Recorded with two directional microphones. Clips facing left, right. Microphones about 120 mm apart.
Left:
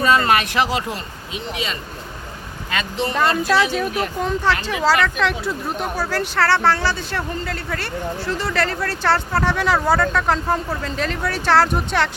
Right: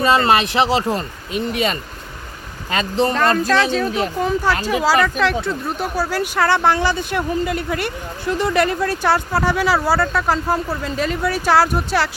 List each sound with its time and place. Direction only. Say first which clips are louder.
0.0 s speech: right 2 dB; 25° right (ahead or behind)
0.9 s speech: right 7 dB; 55° right (ahead or behind)
2.7 s speech: right 5 dB; 40° right (ahead or behind)
3.5 s speech: right 1 dB; 10° left (ahead or behind)
4.2 s speech: right 1 dB; 5° right (ahead or behind)